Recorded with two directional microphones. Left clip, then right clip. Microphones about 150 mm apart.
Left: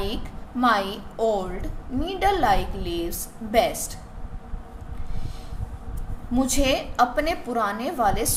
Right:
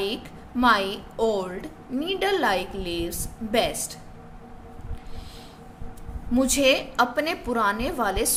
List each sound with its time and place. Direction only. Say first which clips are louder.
0.6 s a woman's voice: right 1 dB; 30° right (ahead or behind)
6.3 s a woman's voice: right 2 dB; 30° right (ahead or behind)